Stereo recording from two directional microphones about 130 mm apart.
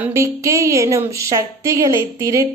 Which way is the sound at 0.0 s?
20° right (ahead or behind).